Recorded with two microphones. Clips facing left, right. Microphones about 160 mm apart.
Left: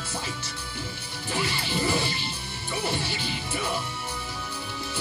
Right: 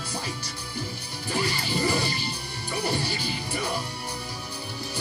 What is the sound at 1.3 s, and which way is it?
Music, centre (ahead or behind).